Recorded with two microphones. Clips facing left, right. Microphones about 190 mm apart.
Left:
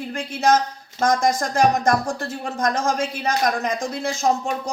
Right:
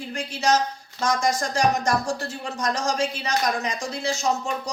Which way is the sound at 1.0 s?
55° left (ahead or behind).